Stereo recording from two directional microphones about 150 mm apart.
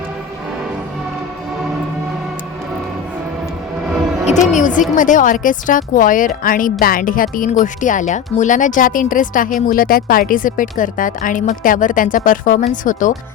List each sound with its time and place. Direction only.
4.3 s a woman's voice: 55° left (ahead or behind)